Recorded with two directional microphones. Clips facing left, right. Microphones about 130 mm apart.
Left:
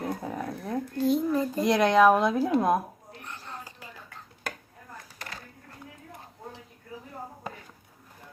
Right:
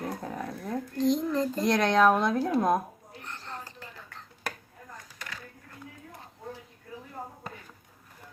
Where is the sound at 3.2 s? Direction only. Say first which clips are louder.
Right 1 dB; 10° left (ahead or behind).